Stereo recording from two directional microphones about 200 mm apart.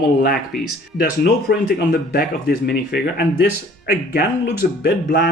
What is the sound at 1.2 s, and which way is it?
Speech, 50° left (ahead or behind).